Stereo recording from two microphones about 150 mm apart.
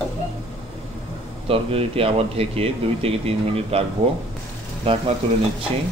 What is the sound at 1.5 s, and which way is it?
Speech, 40° right (ahead or behind).